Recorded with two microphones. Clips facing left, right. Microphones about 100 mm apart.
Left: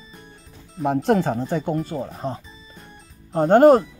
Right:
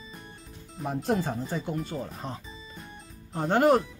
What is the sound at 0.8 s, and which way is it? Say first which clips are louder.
Speech: left 9 dB; 80° left.